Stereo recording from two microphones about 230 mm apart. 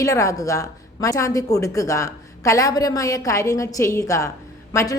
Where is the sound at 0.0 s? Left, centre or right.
Centre.